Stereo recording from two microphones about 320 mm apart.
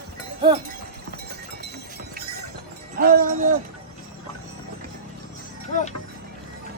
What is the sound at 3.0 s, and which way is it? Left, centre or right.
Music, right.